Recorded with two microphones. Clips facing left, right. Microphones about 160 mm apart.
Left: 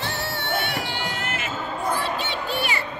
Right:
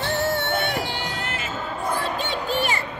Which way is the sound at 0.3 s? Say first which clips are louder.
Right 4 dB; 50° right (ahead or behind).